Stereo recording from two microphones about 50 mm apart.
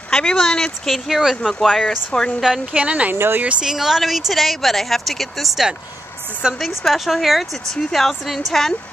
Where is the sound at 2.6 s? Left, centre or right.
Right.